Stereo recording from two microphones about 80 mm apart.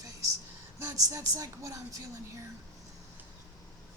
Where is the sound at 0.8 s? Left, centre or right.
Right.